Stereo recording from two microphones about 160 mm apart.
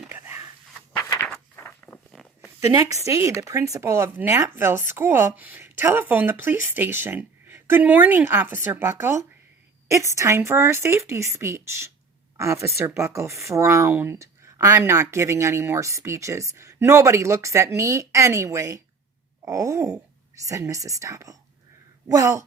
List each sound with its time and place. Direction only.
0.1 s a sound: 15° right (ahead or behind)
1.5 s walk: 15° left (ahead or behind)
2.4 s speech: 20° right (ahead or behind)